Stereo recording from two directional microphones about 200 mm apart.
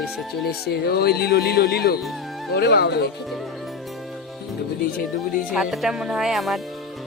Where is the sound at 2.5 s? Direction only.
55° left (ahead or behind).